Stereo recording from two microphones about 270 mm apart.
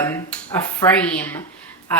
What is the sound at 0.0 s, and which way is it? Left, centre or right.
A woman's voice, centre.